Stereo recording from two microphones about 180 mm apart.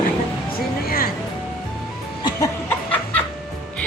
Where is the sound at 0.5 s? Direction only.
55° left (ahead or behind).